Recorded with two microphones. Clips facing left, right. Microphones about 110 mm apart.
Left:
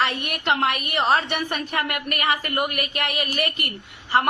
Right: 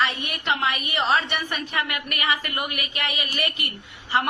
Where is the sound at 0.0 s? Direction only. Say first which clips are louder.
Left 2 dB; 55° left (ahead or behind).